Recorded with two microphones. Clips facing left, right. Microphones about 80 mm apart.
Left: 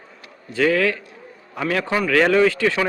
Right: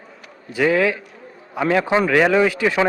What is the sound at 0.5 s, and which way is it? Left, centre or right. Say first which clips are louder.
A man's voice: right 1 dB; centre.